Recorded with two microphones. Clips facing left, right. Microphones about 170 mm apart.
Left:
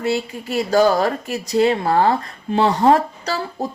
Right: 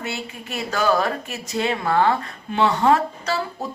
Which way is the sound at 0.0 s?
35° left (ahead or behind).